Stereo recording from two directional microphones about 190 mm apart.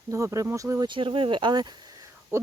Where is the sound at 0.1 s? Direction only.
15° right (ahead or behind).